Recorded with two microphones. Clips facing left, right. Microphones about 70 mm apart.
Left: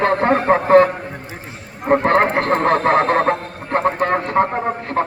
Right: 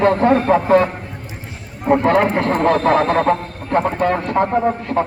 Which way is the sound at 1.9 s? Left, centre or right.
Left.